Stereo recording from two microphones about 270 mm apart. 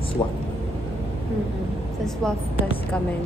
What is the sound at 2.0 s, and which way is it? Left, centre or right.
Speech, centre.